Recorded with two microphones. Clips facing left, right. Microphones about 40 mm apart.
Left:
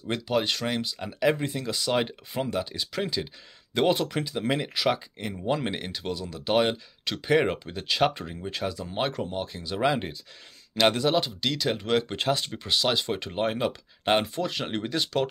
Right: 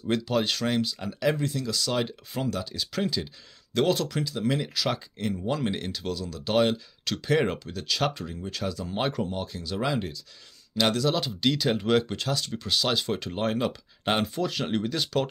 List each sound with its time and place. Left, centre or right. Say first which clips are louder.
0.1 s speech: right 1 dB; centre; by 4.8 s left
4.8 s speech: left 2 dB; centre; by 11.1 s left
11.1 s speech: even; centre
12.2 s speech: left 3 dB; left
12.6 s speech: left 1 dB; centre